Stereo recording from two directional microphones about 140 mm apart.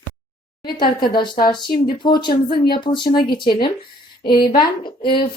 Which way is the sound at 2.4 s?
90° left.